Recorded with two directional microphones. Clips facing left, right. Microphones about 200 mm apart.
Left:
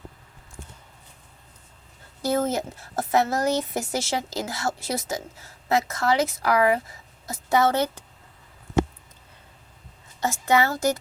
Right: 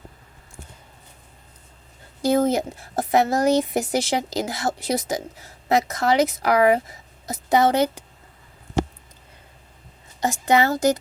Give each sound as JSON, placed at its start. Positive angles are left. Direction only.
{"t": 2.2, "sound": "a woman's voice", "side_deg": -15}
{"t": 10.2, "sound": "a woman's voice", "side_deg": -15}